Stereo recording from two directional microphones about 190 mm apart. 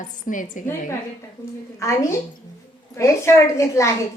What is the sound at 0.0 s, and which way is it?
Speech, 45° left (ahead or behind).